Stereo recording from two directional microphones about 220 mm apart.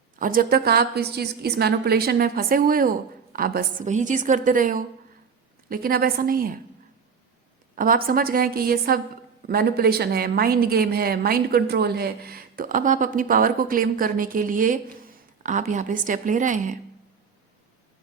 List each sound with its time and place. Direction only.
0.2 s a woman's voice: 40° right (ahead or behind)
7.8 s a woman's voice: 40° right (ahead or behind)